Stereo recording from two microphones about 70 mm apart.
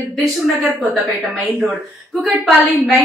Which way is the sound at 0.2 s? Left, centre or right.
Centre.